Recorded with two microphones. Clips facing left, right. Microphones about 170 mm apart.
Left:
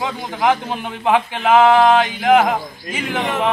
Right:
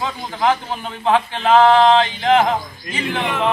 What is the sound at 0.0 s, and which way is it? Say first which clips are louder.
Speech: left 1 dB; 15° left (ahead or behind).